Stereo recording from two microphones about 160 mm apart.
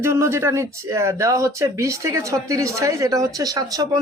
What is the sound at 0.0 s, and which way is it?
Speech, 15° right (ahead or behind).